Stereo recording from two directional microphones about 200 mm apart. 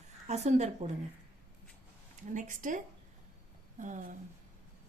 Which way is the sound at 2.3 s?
40° right (ahead or behind).